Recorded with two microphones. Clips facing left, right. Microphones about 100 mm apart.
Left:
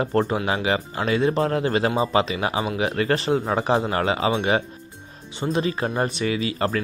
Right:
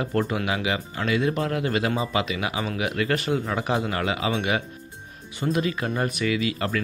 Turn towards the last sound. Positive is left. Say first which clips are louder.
# left 2 dB
turn(degrees=30)  # may be behind; listen again after turning